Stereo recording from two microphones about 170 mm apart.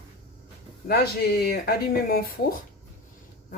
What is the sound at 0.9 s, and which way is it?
Speech, 65° left (ahead or behind).